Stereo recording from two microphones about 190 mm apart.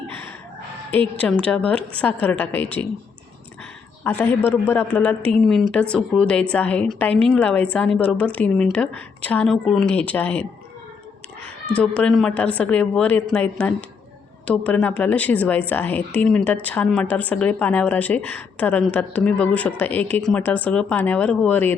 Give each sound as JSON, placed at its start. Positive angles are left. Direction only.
{"t": 1.2, "sound": "a woman's voice", "side_deg": 5}
{"t": 4.0, "sound": "a woman's voice", "side_deg": 10}
{"t": 11.7, "sound": "a woman's voice", "side_deg": 5}